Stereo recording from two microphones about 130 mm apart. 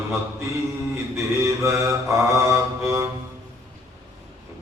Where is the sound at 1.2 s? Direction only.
20° right (ahead or behind).